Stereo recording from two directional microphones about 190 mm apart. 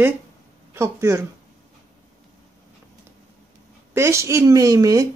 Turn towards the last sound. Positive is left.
turn(degrees=-15)  # may be behind; listen again after turning